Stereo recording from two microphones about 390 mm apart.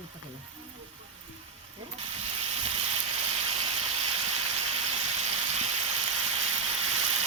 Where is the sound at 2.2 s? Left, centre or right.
Centre.